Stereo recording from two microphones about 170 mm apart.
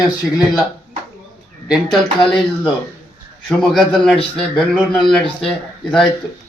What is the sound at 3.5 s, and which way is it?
A man's voice, centre (ahead or behind).